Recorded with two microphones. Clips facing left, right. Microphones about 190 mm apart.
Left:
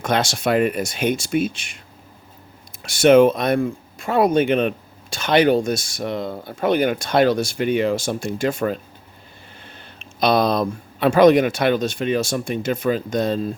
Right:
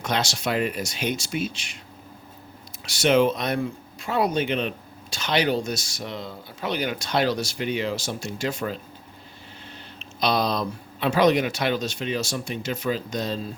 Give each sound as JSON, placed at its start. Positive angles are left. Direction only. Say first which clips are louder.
{"t": 0.0, "sound": "speech", "louder": "left 6 dB", "side_deg": 50}
{"t": 2.8, "sound": "speech", "louder": "left 7 dB", "side_deg": 50}
{"t": 10.0, "sound": "speech", "louder": "left 6 dB", "side_deg": 50}